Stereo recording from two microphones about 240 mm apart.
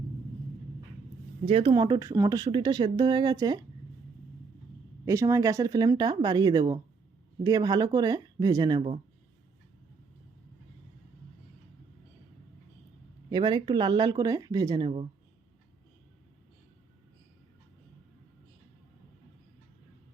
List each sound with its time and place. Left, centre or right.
1.5 s speech: right
5.0 s speech: centre
13.3 s speech: centre